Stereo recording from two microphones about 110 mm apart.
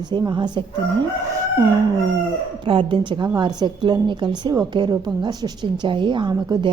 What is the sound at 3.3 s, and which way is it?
A woman's voice, 40° right (ahead or behind).